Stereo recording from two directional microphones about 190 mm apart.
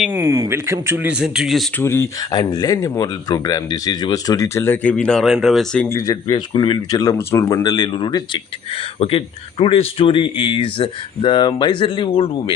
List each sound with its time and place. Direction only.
0.0 s speech: 10° right (ahead or behind)
1.8 s speech: 15° left (ahead or behind)
6.0 s speech: 20° left (ahead or behind)